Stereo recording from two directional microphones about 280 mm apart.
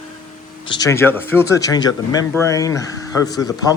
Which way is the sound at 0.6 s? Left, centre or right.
Centre.